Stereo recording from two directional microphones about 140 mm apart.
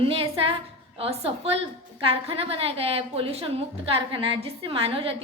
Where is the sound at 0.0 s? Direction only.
40° right (ahead or behind).